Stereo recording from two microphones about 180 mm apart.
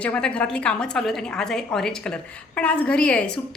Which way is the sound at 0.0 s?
5° left (ahead or behind).